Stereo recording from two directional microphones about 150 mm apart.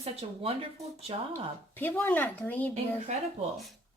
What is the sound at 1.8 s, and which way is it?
Speech, 15° left (ahead or behind).